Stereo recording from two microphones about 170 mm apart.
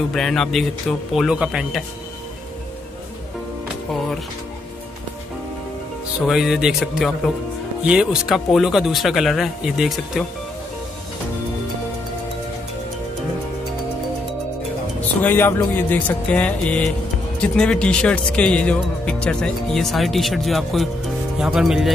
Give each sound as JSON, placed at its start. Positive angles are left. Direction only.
{"t": 0.1, "sound": "speech", "side_deg": 0}
{"t": 6.2, "sound": "speech", "side_deg": 0}
{"t": 15.2, "sound": "music", "side_deg": 10}
{"t": 17.4, "sound": "speech", "side_deg": 5}